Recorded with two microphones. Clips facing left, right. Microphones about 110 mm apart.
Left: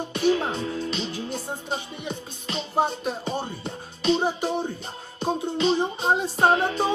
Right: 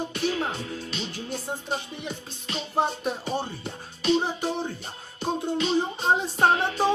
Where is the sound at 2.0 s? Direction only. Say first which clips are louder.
Left 3 dB; 25° left (ahead or behind).